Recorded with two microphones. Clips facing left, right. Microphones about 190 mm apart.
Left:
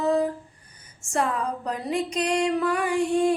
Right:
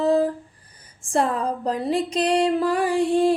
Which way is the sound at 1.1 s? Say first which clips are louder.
Right 4 dB; 30° right (ahead or behind).